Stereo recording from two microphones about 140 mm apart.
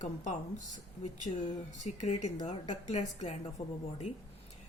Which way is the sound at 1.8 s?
55° left (ahead or behind).